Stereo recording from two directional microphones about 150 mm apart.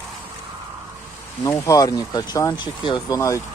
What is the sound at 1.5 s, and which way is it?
Speech, 20° left (ahead or behind).